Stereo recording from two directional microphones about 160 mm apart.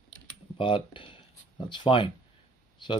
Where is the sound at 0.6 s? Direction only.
30° left (ahead or behind).